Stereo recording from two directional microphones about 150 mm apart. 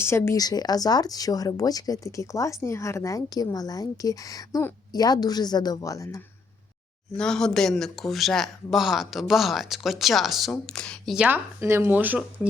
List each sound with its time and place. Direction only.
0.0 s speech: 15° left (ahead or behind)
7.2 s speech: 5° left (ahead or behind)
11.3 s speech: 15° right (ahead or behind)